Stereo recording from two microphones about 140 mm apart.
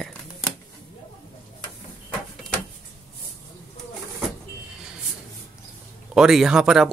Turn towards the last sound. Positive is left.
turn(degrees=-5)  # may be behind; listen again after turning